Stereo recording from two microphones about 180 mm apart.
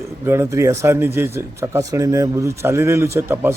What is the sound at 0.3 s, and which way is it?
Speech, 15° right (ahead or behind).